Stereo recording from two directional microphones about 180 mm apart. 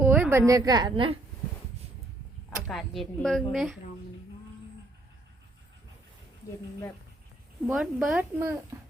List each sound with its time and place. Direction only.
0.0 s a woman's voice: 10° right (ahead or behind)
2.6 s a woman's voice: centre (ahead or behind)
7.7 s speech: centre (ahead or behind)